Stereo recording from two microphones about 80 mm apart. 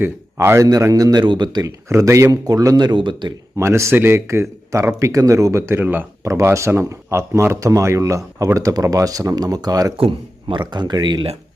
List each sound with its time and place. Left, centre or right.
0.0 s a man's voice: right
0.7 s speech: right
1.2 s speech: right
1.6 s speech: right
3.6 s speech: right